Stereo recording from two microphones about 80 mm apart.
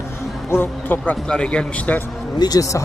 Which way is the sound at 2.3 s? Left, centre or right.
Left.